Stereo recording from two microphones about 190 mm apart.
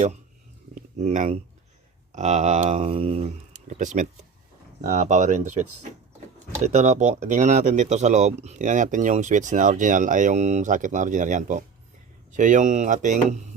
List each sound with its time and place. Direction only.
1.0 s speech: 40° right (ahead or behind)
4.8 s speech: 40° right (ahead or behind)